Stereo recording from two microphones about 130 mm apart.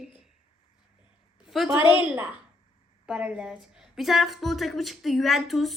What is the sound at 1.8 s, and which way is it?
Speech, 40° left (ahead or behind).